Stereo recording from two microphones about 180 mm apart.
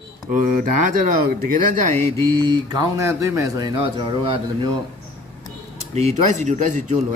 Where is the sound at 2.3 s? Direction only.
25° right (ahead or behind).